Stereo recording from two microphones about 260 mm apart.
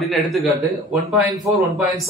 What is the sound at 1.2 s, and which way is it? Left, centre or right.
Speech, centre.